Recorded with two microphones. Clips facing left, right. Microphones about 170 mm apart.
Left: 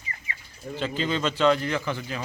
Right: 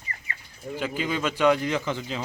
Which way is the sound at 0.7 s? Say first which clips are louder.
Left 1 dB; 10° right (ahead or behind).